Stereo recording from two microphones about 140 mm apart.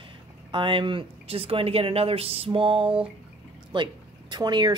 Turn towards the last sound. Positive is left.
turn(degrees=-30)  # may be behind; listen again after turning